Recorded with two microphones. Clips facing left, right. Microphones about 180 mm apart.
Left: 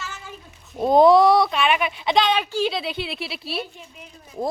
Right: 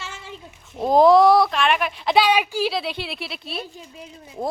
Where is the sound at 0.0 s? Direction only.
25° right (ahead or behind).